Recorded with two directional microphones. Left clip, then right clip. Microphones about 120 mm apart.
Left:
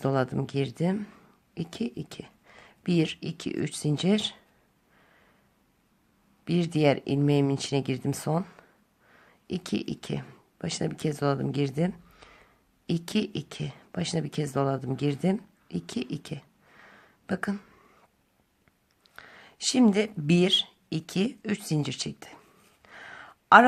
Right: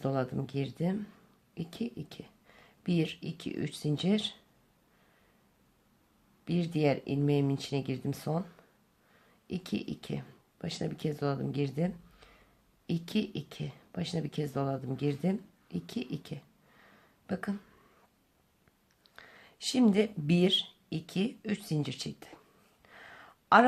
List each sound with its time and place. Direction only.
0.0 s speech: 30° left (ahead or behind)
6.4 s speech: 25° left (ahead or behind)
19.0 s speech: 20° left (ahead or behind)
22.8 s a sound: 20° left (ahead or behind)